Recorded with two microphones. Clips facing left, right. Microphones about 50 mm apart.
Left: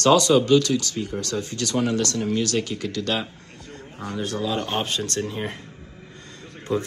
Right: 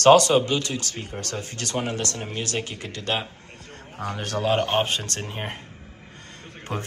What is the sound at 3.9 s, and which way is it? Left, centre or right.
Speech, right.